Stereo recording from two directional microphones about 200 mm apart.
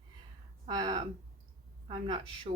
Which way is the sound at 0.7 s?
20° right (ahead or behind).